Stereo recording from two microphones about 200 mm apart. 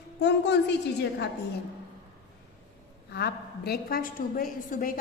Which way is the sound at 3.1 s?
55° left (ahead or behind).